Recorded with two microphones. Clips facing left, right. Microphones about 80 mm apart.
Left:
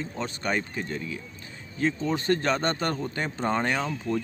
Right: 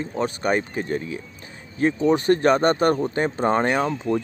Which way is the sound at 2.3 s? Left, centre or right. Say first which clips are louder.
Right 6 dB; right.